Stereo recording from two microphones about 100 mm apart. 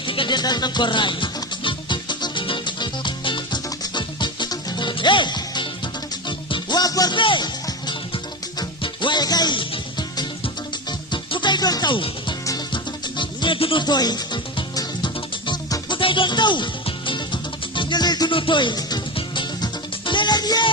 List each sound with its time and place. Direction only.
0.0 s music: 60° left (ahead or behind); by 7.2 s 40° left (ahead or behind)
7.2 s music: 55° left (ahead or behind)
13.8 s music: 45° left (ahead or behind)
18.3 s speech: 55° left (ahead or behind)
19.1 s music: 55° left (ahead or behind)